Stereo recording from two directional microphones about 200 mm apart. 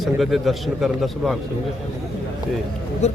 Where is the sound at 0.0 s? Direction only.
Centre (ahead or behind).